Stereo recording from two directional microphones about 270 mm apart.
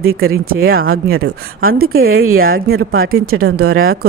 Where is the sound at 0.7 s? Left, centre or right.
Right.